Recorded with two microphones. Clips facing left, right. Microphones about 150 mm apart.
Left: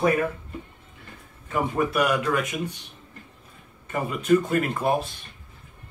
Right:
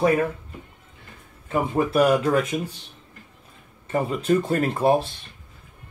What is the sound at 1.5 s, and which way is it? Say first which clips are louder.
Speech: right 2 dB; 30° right (ahead or behind).